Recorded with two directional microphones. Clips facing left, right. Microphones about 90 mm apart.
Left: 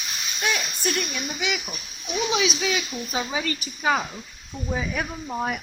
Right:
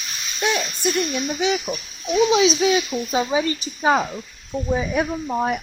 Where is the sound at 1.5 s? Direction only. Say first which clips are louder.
Right 8 dB; 60° right (ahead or behind).